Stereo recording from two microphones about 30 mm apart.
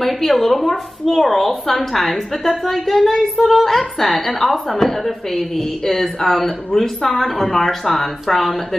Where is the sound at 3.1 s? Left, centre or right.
Centre.